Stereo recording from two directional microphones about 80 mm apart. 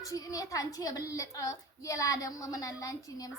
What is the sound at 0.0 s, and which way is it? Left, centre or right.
A woman's voice, left.